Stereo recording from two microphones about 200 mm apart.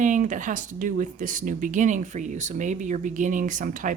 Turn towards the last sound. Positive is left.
turn(degrees=-40)  # may be behind; listen again after turning